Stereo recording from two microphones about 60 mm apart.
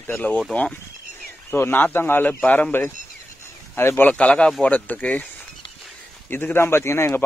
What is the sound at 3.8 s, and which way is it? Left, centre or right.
Speech, left.